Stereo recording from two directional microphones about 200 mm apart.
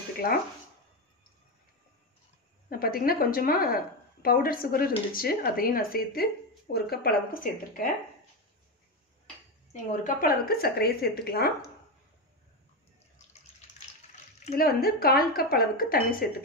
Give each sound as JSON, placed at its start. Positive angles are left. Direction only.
{"t": 0.2, "sound": "a woman's voice", "side_deg": 50}
{"t": 2.7, "sound": "a woman's voice", "side_deg": 45}
{"t": 9.7, "sound": "a woman's voice", "side_deg": 40}
{"t": 14.5, "sound": "a woman's voice", "side_deg": 50}